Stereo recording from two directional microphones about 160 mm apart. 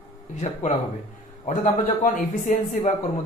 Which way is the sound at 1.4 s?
55° left (ahead or behind).